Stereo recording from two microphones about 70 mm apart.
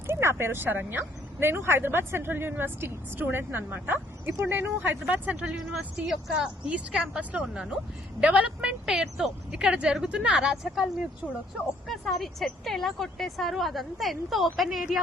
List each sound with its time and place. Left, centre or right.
0.1 s speech: right
4.8 s speech: right
5.5 s speech: centre
6.3 s a woman's voice: centre
11.9 s speech: centre